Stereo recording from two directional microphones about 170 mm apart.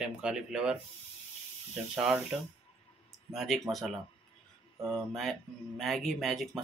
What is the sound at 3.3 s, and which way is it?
Speech, centre (ahead or behind).